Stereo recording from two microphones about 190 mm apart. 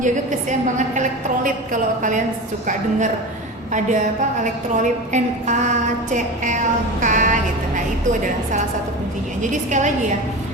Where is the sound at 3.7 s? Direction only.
40° right (ahead or behind).